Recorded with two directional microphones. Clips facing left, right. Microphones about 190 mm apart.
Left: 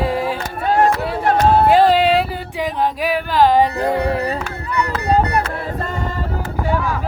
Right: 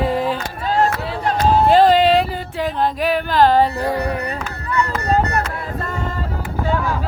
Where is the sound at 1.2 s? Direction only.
60° left (ahead or behind).